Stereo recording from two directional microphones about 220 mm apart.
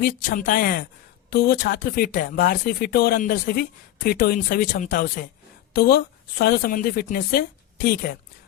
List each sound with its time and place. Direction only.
0.0 s speech: 40° left (ahead or behind)